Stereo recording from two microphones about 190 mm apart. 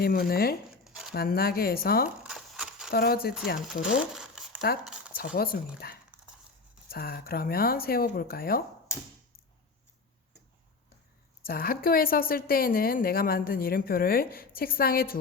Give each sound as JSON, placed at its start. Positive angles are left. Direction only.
{"t": 0.0, "sound": "a woman's voice", "side_deg": 55}
{"t": 0.9, "sound": "a sound", "side_deg": 0}
{"t": 1.1, "sound": "a woman's voice", "side_deg": 55}
{"t": 2.0, "sound": "a sound", "side_deg": -5}
{"t": 2.9, "sound": "a woman's voice", "side_deg": 55}
{"t": 3.8, "sound": "crumpling", "side_deg": -5}
{"t": 4.8, "sound": "a sound", "side_deg": -5}
{"t": 5.1, "sound": "a woman's voice", "side_deg": 50}
{"t": 11.4, "sound": "a woman's voice", "side_deg": 50}